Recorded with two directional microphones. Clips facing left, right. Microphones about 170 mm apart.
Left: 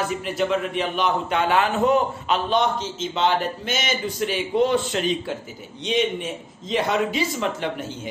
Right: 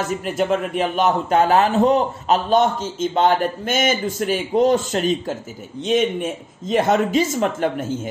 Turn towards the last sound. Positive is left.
turn(degrees=-45)  # may be behind; listen again after turning